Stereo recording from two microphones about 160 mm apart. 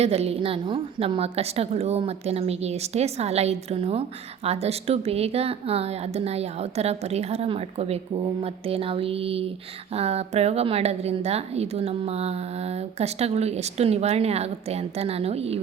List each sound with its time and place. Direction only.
0.0 s a woman's voice: 40° right (ahead or behind)